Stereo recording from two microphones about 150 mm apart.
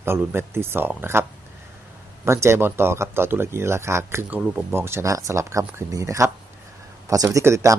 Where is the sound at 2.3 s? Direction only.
20° right (ahead or behind).